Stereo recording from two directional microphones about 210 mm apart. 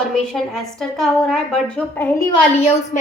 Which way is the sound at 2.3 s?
30° left (ahead or behind).